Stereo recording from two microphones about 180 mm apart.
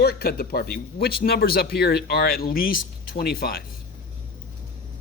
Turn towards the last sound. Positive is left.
turn(degrees=55)  # may be behind; listen again after turning